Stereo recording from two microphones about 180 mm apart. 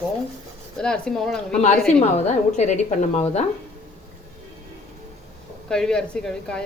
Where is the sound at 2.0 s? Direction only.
40° left (ahead or behind).